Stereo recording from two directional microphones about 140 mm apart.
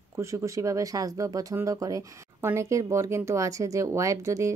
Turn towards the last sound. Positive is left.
turn(degrees=-20)  # may be behind; listen again after turning